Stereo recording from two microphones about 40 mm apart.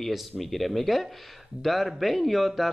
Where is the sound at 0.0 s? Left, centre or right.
Centre.